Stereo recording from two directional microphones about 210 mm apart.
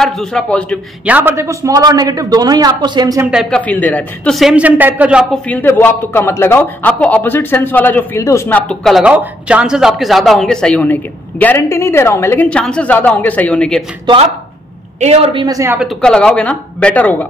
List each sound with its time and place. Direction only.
0.0 s a man's voice: 5° left (ahead or behind)
1.0 s a man's voice: 10° right (ahead or behind)
3.3 s a man's voice: centre (ahead or behind)
5.5 s a man's voice: 10° left (ahead or behind)
15.0 s a woman's voice: 30° right (ahead or behind); by 15.9 s 10° right (ahead or behind)
16.0 s a man's voice: 5° left (ahead or behind)